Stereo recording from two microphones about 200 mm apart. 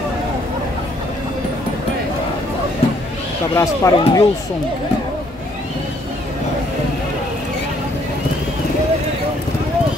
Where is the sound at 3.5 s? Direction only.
15° left (ahead or behind).